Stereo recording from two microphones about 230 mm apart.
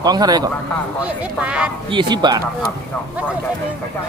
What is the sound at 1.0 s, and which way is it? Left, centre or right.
Speech, centre.